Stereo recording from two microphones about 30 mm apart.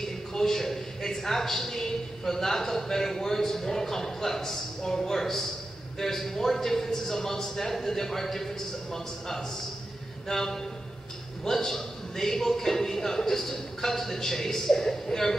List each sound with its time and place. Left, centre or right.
0.0 s a man's voice: centre
5.2 s a man's voice: centre